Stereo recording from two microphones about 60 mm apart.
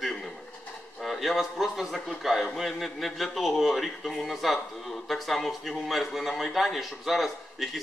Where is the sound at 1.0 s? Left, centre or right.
Centre.